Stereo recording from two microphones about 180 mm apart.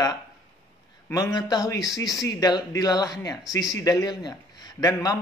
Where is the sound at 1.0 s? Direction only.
20° left (ahead or behind).